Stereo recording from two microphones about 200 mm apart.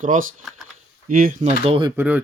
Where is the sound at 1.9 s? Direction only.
10° right (ahead or behind).